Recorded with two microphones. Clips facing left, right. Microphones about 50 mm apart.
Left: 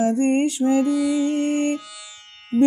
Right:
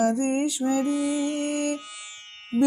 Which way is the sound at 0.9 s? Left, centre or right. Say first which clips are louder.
Left 5 dB; right.